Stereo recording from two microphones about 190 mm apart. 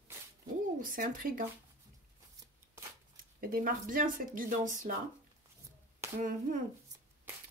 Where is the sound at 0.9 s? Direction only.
45° right (ahead or behind).